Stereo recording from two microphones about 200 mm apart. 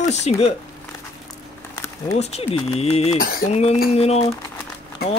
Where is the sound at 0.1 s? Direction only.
35° left (ahead or behind).